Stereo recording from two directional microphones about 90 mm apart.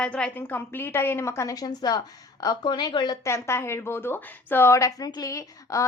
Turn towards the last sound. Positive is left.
turn(degrees=35)  # may be behind; listen again after turning